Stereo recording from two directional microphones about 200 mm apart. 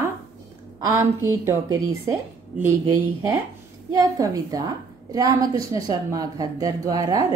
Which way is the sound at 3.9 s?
15° right (ahead or behind).